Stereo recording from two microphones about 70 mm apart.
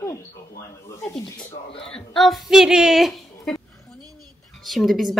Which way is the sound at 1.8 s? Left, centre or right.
Centre.